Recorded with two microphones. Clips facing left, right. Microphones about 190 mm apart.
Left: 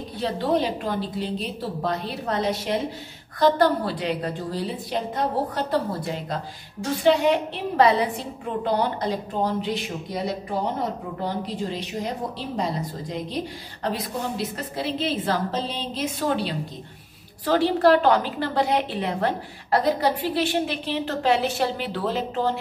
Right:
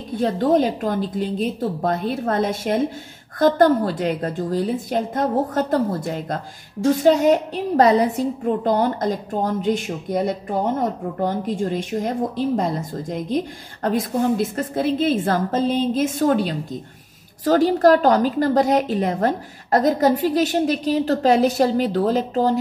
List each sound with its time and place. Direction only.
0.1 s a woman's voice: 45° right (ahead or behind)